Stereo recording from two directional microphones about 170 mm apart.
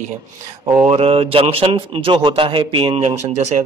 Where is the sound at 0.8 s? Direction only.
35° right (ahead or behind).